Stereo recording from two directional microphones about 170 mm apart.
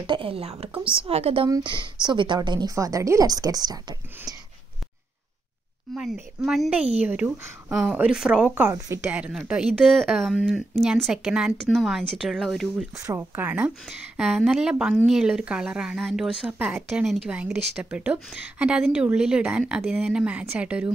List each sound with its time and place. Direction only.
0.0 s a woman's voice: 30° right (ahead or behind)
5.9 s a woman's voice: 5° right (ahead or behind)
12.9 s a woman's voice: 15° right (ahead or behind)